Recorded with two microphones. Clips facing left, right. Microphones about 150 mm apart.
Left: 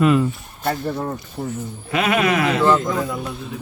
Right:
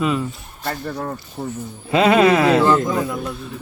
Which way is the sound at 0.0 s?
Centre (ahead or behind).